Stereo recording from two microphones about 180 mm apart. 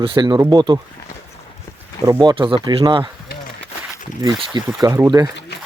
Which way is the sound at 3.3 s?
55° left (ahead or behind).